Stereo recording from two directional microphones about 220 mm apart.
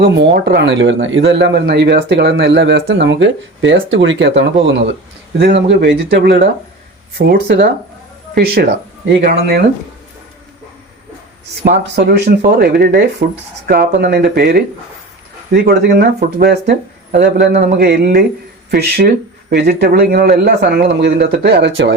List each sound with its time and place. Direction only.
0.0 s speech: 50° right (ahead or behind)
11.6 s speech: 50° right (ahead or behind)